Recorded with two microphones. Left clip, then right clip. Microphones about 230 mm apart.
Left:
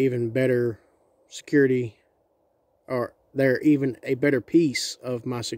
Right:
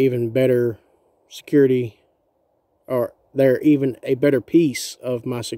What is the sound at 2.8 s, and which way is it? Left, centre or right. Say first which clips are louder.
Speech: right 6 dB; centre.